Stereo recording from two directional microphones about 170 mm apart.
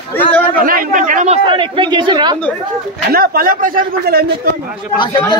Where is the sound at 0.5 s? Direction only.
55° right (ahead or behind).